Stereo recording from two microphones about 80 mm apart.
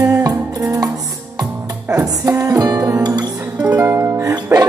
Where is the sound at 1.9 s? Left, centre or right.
Right.